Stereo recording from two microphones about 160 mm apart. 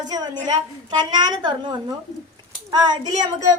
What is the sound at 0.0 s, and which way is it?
A woman's voice, 25° right (ahead or behind).